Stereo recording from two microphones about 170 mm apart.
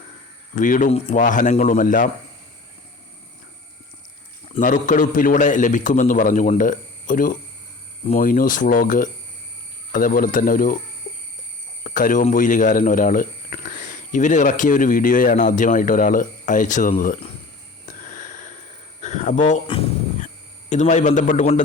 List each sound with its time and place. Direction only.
0.5 s speech: 50° left (ahead or behind)
1.2 s speech: 50° left (ahead or behind)
4.6 s speech: 50° left (ahead or behind)
11.8 s speech: 50° left (ahead or behind)
17.8 s wheeze: 50° left (ahead or behind)
19.0 s speech: 45° left (ahead or behind)
19.6 s a sound: 35° left (ahead or behind)